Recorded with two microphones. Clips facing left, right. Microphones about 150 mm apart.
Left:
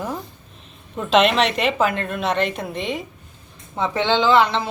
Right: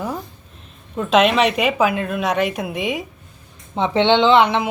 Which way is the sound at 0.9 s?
5° right (ahead or behind).